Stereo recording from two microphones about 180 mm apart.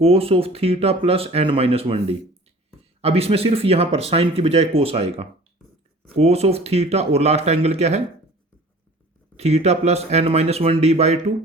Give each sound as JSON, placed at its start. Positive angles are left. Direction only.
{"t": 0.0, "sound": "speech", "side_deg": -30}
{"t": 9.3, "sound": "speech", "side_deg": -35}